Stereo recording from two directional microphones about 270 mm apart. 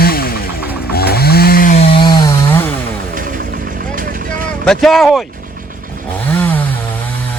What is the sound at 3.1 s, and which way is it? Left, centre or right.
Vehicle, right.